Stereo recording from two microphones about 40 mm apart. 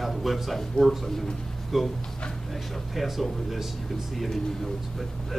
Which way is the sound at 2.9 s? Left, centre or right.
Centre.